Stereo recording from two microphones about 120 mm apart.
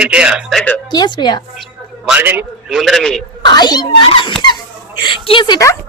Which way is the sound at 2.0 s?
10° right (ahead or behind).